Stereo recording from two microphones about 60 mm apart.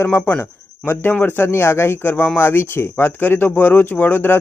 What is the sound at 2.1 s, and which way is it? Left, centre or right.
Speech, left.